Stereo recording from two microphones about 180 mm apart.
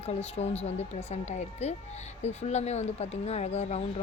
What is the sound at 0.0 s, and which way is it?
Speech, 35° left (ahead or behind).